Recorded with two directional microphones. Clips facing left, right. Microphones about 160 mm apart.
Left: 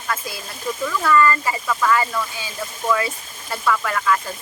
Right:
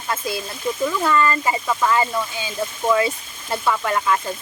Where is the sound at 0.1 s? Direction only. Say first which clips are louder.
Right 7 dB; 25° right (ahead or behind).